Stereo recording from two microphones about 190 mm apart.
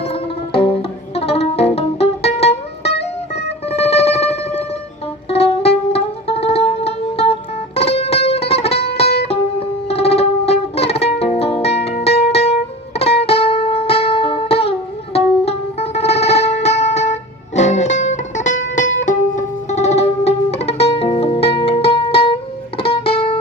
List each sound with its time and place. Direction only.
0.0 s music: 30° left (ahead or behind)